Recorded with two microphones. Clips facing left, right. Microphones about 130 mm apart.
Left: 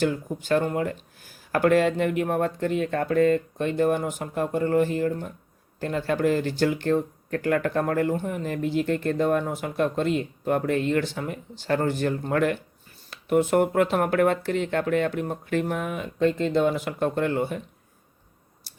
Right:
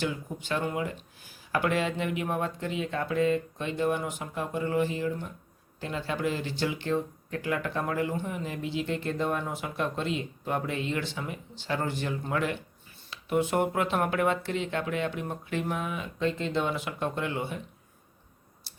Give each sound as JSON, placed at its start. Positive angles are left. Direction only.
{"t": 0.0, "sound": "speech", "side_deg": 45}